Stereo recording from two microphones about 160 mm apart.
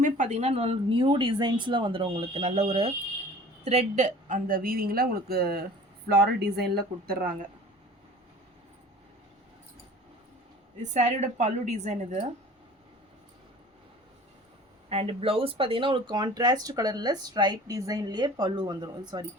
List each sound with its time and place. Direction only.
0.0 s speech: 50° right (ahead or behind); by 5.6 s 75° right (ahead or behind)
6.1 s speech: 90° right; by 7.3 s 65° right (ahead or behind)
10.9 s a woman's voice: 45° right (ahead or behind)
14.8 s speech: 40° right (ahead or behind)